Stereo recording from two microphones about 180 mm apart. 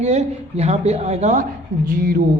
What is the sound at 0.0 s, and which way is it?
A woman's voice, 35° right (ahead or behind).